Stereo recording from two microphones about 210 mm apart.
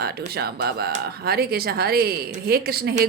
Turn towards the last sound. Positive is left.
turn(degrees=-50)  # may be behind; listen again after turning